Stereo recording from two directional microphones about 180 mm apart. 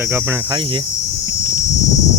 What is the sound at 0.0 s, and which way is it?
Cricket, 10° right (ahead or behind).